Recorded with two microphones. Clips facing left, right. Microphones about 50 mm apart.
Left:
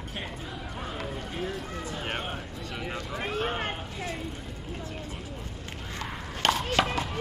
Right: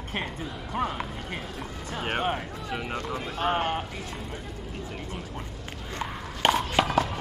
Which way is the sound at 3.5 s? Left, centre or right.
Right.